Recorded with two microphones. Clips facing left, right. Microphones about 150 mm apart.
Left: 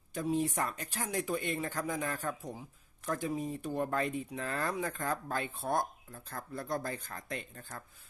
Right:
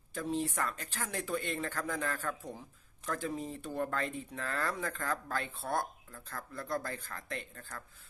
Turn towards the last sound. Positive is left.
turn(degrees=25)  # may be behind; listen again after turning